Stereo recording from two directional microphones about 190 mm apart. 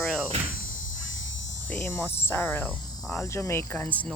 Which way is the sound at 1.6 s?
10° left (ahead or behind).